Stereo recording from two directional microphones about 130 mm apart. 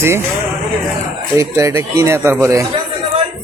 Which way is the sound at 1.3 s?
20° right (ahead or behind).